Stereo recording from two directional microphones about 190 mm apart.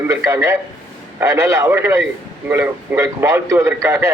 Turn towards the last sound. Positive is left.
turn(degrees=-15)  # may be behind; listen again after turning